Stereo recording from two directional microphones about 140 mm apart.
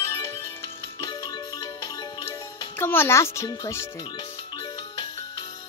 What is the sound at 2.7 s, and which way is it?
A child's voice, 15° left (ahead or behind).